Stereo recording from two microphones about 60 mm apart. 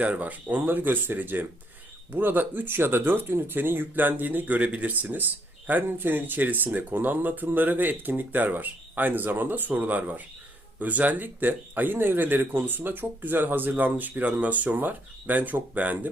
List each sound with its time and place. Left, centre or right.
0.0 s speech: right